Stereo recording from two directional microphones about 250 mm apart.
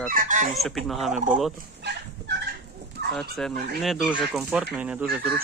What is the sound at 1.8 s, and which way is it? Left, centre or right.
Fowl, right.